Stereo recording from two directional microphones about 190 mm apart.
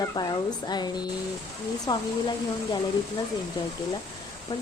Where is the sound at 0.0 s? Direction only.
20° left (ahead or behind).